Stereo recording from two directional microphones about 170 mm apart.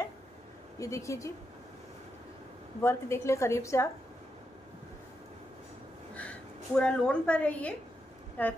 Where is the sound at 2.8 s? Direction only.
15° left (ahead or behind).